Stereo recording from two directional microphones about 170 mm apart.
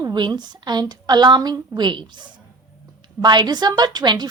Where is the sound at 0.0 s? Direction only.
25° right (ahead or behind).